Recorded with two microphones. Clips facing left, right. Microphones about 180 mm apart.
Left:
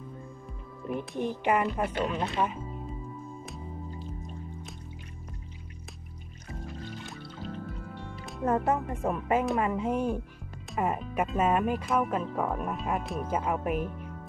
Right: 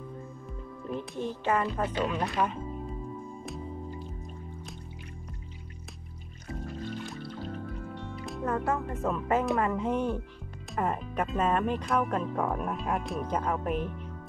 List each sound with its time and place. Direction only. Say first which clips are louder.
0.8 s speech: left 2 dB; 15° left (ahead or behind)
2.0 s speech: even; centre (ahead or behind)
7.1 s music: right 2 dB; centre (ahead or behind)
8.5 s speech: left 3 dB; 20° left (ahead or behind)